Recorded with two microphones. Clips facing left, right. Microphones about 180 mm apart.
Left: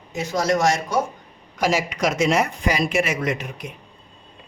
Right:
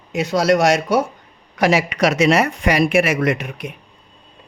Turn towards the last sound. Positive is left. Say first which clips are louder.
# right 5 dB
turn(degrees=-65)  # may be behind; listen again after turning